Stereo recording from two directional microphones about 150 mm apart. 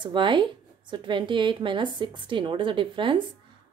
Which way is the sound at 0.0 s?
30° right (ahead or behind).